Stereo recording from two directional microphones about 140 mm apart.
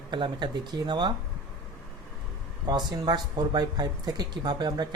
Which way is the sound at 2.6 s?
30° right (ahead or behind).